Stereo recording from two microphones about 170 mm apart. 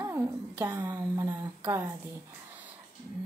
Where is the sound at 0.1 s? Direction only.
15° right (ahead or behind).